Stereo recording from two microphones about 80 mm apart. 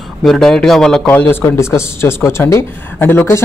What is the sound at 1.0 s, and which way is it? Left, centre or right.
Speech, left.